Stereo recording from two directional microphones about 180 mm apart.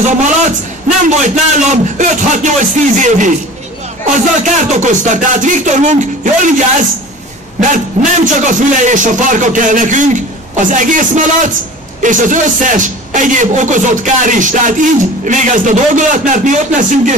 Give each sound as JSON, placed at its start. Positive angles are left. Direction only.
{"t": 0.8, "sound": "a man's voice", "side_deg": -40}
{"t": 7.6, "sound": "a man's voice", "side_deg": -45}